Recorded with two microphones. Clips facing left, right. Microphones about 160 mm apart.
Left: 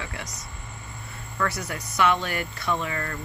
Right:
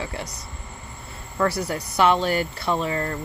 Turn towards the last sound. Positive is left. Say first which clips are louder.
# right 4 dB
turn(degrees=-30)  # may be behind; listen again after turning